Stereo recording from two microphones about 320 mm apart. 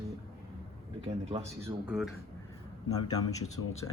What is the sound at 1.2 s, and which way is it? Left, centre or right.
Speech, centre.